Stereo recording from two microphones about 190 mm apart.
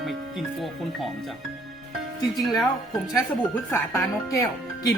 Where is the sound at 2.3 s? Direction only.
Centre (ahead or behind).